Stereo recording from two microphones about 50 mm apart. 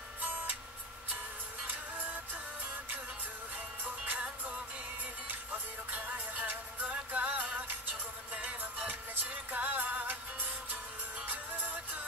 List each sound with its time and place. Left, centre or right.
0.2 s music: right
3.8 s music: right
11.2 s music: right